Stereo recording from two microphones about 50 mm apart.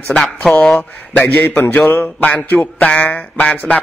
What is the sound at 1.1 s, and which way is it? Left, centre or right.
Mantra, left.